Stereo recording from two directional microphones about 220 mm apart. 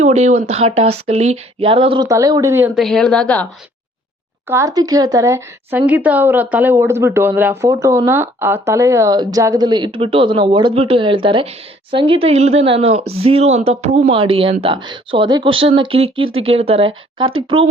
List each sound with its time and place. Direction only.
0.0 s speech: 30° right (ahead or behind); by 3.4 s 5° left (ahead or behind)
4.4 s speech: 15° right (ahead or behind)